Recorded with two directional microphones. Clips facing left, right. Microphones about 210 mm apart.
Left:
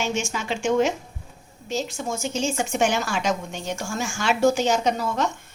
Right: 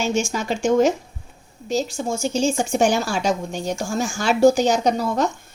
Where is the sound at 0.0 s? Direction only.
40° right (ahead or behind).